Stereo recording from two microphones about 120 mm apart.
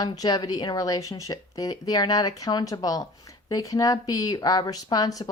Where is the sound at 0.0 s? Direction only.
35° left (ahead or behind).